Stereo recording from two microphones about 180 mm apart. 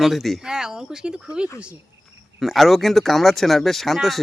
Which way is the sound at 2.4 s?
Centre (ahead or behind).